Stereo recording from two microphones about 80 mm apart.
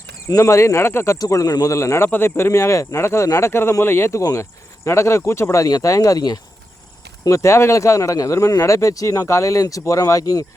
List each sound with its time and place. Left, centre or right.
0.3 s speech: left
1.2 s speech: left
2.0 s speech: left
5.6 s speech: left
7.3 s speech: left